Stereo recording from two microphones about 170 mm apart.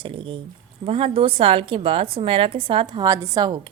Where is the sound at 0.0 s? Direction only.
30° right (ahead or behind).